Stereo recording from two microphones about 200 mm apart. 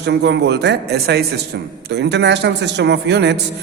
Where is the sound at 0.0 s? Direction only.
55° right (ahead or behind).